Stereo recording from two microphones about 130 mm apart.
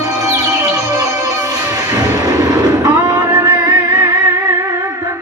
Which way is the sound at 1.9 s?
30° right (ahead or behind).